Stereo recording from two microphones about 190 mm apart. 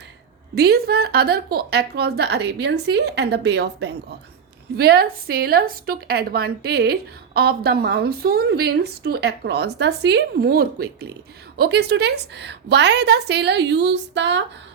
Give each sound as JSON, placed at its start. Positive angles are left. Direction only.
{"t": 0.5, "sound": "a woman's voice", "side_deg": -55}